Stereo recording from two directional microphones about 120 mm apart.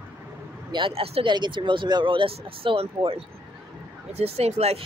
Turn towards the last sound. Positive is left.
turn(degrees=-60)  # may be behind; listen again after turning